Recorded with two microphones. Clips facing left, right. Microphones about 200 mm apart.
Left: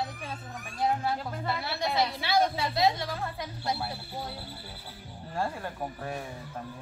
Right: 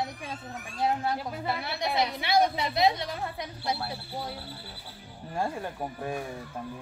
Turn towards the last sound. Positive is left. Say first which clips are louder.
# right 2 dB
turn(degrees=-15)  # may be behind; listen again after turning